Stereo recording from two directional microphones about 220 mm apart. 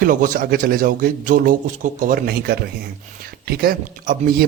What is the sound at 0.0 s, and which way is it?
A man's voice, 35° right (ahead or behind).